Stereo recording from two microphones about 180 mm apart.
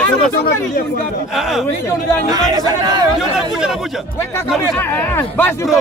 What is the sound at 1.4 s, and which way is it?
Speech, centre (ahead or behind).